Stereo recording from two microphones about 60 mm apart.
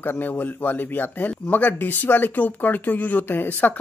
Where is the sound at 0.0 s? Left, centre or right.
Left.